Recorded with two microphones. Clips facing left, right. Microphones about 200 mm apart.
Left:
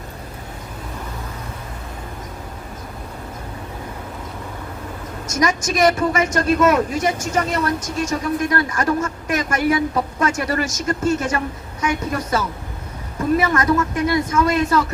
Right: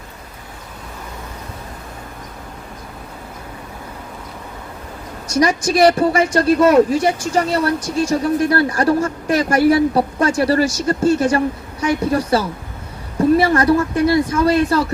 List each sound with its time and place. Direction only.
5.3 s speech: 35° right (ahead or behind)